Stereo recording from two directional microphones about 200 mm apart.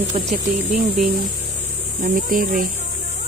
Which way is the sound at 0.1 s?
25° right (ahead or behind).